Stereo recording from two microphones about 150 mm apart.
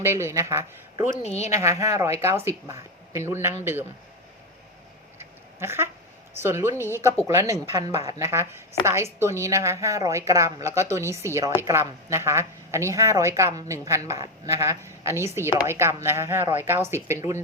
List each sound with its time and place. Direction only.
0.0 s speech: 15° right (ahead or behind)
1.2 s speech: 45° left (ahead or behind)
1.5 s a woman's voice: 20° right (ahead or behind)
5.5 s a woman's voice: 15° right (ahead or behind)